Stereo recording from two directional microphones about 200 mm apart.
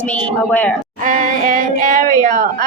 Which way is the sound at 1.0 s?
40° right (ahead or behind).